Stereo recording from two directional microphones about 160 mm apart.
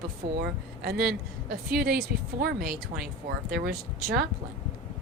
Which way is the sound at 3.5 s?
80° right.